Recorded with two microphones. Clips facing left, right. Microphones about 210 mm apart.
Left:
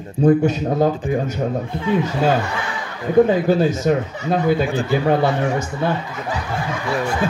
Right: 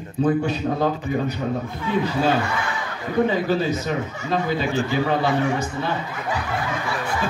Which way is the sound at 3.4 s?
50° left (ahead or behind).